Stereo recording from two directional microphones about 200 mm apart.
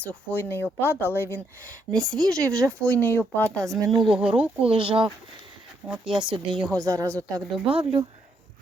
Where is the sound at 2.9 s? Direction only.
10° left (ahead or behind).